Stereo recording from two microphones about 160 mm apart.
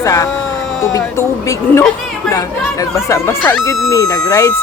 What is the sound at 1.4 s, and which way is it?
Speech, 15° left (ahead or behind).